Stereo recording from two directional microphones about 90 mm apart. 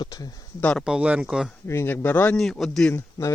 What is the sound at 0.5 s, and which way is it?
Speech, 15° left (ahead or behind).